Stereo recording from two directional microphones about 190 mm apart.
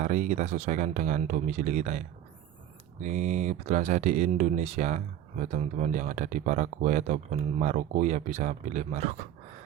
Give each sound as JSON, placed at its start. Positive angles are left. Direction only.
{"t": 0.0, "sound": "speech", "side_deg": -40}